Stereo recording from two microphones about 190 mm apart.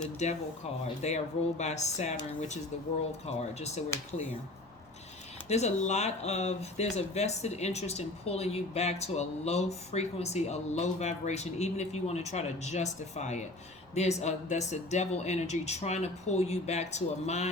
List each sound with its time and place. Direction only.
0.0 s speech: 35° left (ahead or behind)
5.5 s speech: 35° left (ahead or behind)